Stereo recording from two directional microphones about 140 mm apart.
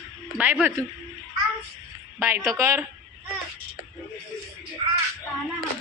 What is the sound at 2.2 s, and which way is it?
Speech, 15° right (ahead or behind).